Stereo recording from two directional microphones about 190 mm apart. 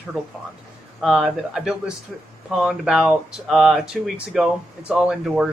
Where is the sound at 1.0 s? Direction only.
Centre (ahead or behind).